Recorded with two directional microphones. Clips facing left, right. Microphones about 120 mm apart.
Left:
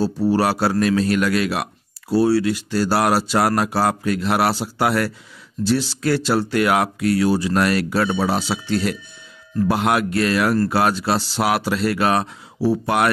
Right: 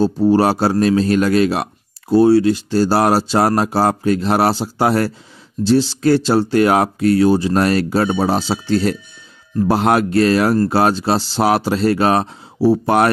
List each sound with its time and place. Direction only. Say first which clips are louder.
0.0 s a man's voice: right 5 dB; 25° right (ahead or behind)